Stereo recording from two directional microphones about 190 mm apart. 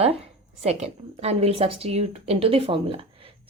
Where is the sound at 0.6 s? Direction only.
35° right (ahead or behind).